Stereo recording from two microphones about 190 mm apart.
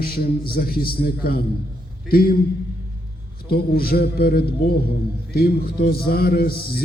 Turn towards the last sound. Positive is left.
turn(degrees=55)  # may be behind; listen again after turning